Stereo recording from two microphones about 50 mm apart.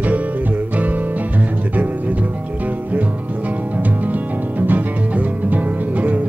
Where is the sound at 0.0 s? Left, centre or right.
Right.